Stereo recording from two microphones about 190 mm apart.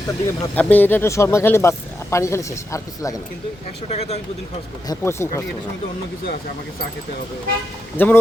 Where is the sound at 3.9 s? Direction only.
35° left (ahead or behind).